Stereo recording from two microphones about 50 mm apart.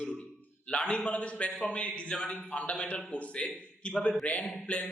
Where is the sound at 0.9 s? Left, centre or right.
Left.